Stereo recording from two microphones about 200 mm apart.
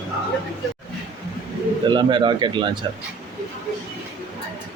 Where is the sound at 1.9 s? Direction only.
25° right (ahead or behind).